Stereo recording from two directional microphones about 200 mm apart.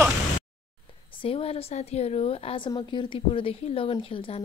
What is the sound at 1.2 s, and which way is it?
A woman's voice, 30° left (ahead or behind).